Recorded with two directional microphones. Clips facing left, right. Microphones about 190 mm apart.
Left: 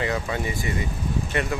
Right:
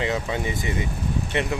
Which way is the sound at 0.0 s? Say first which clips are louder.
Right 1 dB; 20° right (ahead or behind).